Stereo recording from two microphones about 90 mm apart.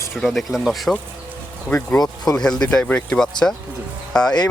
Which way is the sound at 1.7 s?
15° left (ahead or behind).